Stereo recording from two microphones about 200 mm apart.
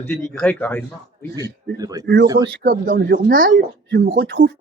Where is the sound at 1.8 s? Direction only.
20° right (ahead or behind).